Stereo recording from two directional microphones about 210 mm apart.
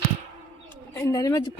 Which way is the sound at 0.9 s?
15° left (ahead or behind).